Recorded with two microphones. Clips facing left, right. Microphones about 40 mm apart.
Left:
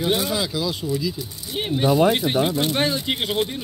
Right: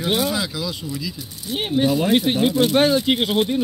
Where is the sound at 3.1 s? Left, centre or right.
Right.